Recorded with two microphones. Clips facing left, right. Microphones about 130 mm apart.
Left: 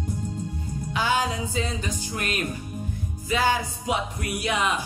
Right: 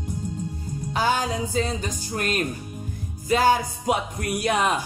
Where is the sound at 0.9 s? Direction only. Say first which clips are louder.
Right 1 dB; 40° right (ahead or behind).